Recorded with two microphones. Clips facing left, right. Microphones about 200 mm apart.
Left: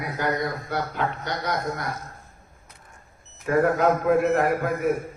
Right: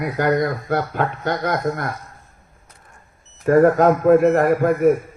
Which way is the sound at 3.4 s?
45° right (ahead or behind).